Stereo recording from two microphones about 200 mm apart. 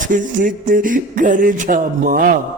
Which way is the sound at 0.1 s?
40° right (ahead or behind).